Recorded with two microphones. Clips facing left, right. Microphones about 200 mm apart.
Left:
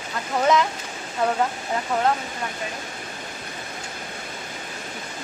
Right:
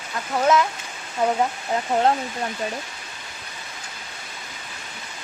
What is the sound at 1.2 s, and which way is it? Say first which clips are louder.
Speech: right 1 dB; 15° right (ahead or behind).